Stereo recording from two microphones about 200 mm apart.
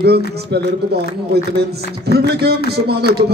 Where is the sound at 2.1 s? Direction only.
55° right (ahead or behind).